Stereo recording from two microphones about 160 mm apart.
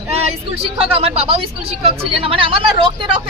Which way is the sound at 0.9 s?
40° right (ahead or behind).